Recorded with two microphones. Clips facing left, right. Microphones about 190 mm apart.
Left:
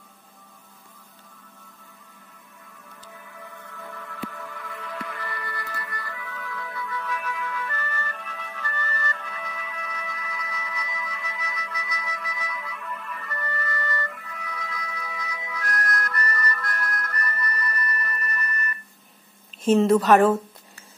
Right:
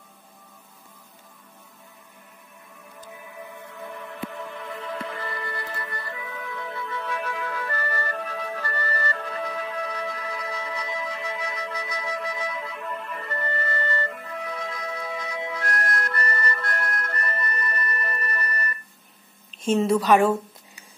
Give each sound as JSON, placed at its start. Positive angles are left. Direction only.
{"t": 3.8, "sound": "music", "side_deg": -20}
{"t": 19.6, "sound": "speech", "side_deg": 0}